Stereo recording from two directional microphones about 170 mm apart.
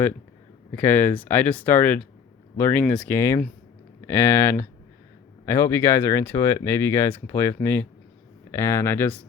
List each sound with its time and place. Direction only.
0.8 s speech: 10° left (ahead or behind)